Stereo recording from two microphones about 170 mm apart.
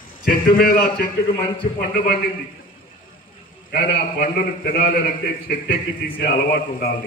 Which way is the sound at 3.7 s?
65° left (ahead or behind).